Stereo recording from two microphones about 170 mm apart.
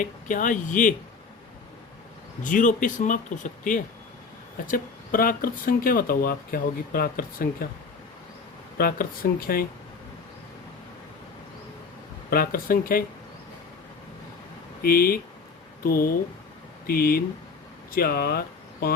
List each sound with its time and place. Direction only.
0.0 s speech: 50° left (ahead or behind)
2.4 s speech: 50° left (ahead or behind)
8.8 s speech: 60° left (ahead or behind)
12.3 s speech: 60° left (ahead or behind)
14.8 s speech: 65° left (ahead or behind)